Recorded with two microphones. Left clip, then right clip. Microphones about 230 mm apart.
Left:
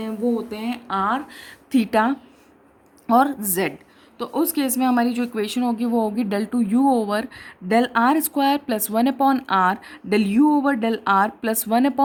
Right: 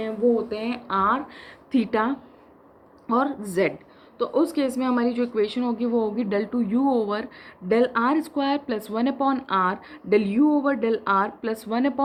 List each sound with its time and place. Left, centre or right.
0.5 s a woman's voice: left